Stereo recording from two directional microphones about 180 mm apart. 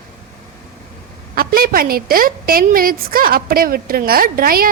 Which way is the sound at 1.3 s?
55° right (ahead or behind).